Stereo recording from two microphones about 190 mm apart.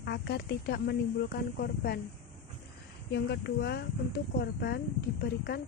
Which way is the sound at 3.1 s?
60° left (ahead or behind).